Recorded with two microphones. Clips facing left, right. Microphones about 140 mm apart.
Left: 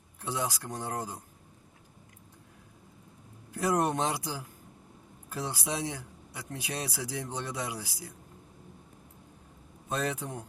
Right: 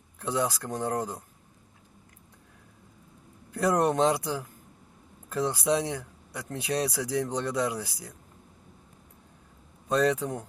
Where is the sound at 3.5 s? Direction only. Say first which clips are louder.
Right 4 dB; 70° right (ahead or behind).